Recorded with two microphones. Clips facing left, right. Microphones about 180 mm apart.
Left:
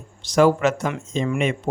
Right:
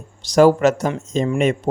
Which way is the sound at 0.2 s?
40° right (ahead or behind).